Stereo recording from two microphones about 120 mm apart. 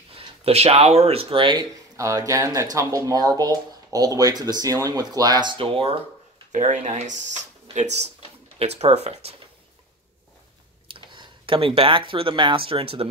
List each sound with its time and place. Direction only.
0.1 s speech: 55° right (ahead or behind)
2.0 s speech: 25° right (ahead or behind)
5.6 s speech: 50° right (ahead or behind)
6.5 s speech: 85° right; by 9.3 s 60° right (ahead or behind)
10.9 s speech: 45° right (ahead or behind)